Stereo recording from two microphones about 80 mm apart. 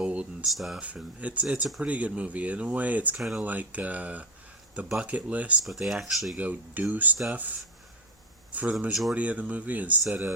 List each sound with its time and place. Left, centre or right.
0.0 s a sound: centre
0.4 s speech: centre
0.8 s speech: centre
3.2 s speech: centre
3.4 s speech: centre
5.6 s speech: centre
6.3 s speech: centre
8.5 s speech: centre
8.9 s speech: centre
9.1 s speech: centre
10.0 s speech: centre